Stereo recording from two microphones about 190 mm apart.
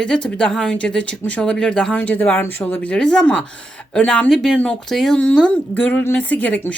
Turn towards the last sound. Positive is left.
turn(degrees=5)  # may be behind; listen again after turning